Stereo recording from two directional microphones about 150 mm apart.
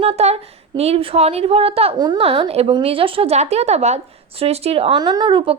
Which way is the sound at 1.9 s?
30° right (ahead or behind).